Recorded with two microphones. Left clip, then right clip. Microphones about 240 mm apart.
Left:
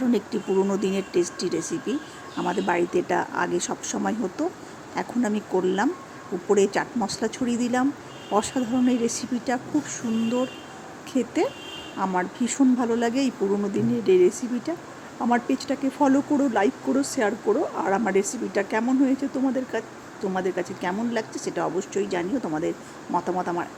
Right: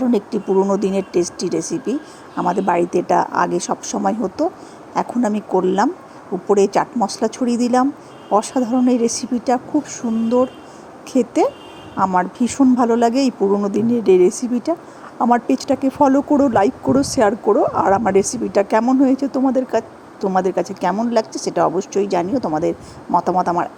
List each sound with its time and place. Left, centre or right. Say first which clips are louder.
0.1 s a woman's voice: right 6 dB; centre
11.1 s a woman's voice: right 8 dB; centre